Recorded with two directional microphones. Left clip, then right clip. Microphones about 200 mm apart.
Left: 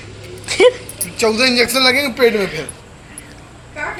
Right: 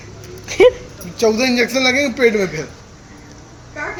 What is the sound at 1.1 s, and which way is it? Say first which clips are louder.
A man's voice: left 1 dB; 50° right (ahead or behind).